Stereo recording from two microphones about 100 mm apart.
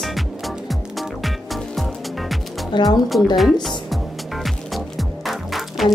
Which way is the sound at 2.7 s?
45° left (ahead or behind).